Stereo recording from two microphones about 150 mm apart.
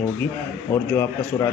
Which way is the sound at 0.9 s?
20° left (ahead or behind).